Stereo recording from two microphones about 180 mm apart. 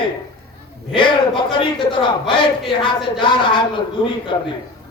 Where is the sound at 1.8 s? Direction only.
25° left (ahead or behind).